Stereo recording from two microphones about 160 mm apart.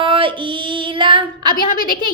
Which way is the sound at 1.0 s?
30° right (ahead or behind).